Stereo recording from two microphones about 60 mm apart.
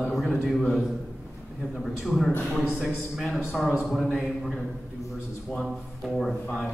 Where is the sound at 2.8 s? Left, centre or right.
Centre.